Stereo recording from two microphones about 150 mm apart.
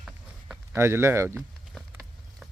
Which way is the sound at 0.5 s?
15° right (ahead or behind).